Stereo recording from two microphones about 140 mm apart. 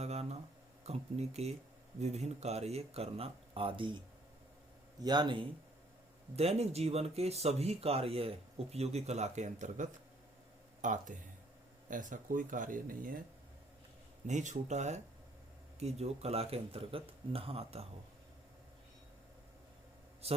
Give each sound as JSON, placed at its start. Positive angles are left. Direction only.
{"t": 0.0, "sound": "a sound", "side_deg": -50}
{"t": 0.9, "sound": "speech", "side_deg": -50}
{"t": 6.3, "sound": "speech", "side_deg": -50}
{"t": 14.3, "sound": "speech", "side_deg": -60}
{"t": 20.2, "sound": "a man's voice", "side_deg": -45}